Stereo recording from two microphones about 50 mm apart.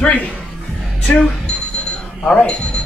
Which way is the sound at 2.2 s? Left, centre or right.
Centre.